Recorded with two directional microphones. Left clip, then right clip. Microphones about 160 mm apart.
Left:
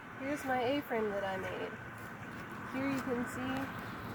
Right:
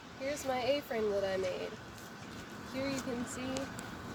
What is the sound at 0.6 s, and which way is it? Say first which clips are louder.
Speech: right 3 dB; 15° right (ahead or behind).